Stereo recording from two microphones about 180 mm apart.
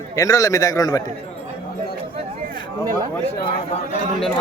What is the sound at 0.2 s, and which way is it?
Speech, 20° left (ahead or behind).